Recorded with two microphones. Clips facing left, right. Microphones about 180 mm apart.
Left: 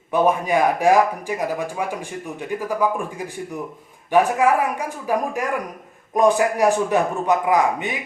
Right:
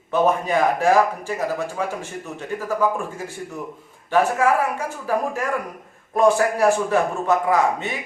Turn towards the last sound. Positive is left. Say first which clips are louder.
# left 1 dB
turn(degrees=15)  # may be behind; listen again after turning